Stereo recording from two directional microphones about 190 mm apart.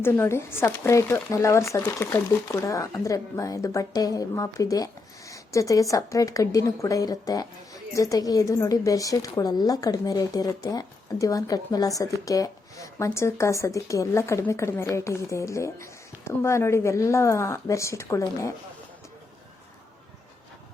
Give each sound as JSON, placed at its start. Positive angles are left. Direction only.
{"t": 0.0, "sound": "speech", "side_deg": 15}